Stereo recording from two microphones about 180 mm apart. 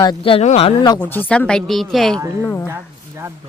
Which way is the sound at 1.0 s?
10° left (ahead or behind).